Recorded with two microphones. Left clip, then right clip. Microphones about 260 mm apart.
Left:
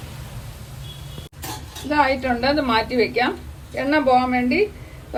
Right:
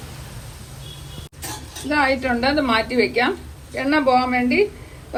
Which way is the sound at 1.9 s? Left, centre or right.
Right.